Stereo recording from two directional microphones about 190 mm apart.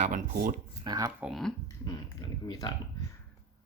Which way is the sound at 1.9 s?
20° left (ahead or behind).